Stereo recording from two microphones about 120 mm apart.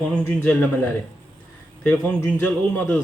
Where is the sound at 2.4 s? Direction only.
15° left (ahead or behind).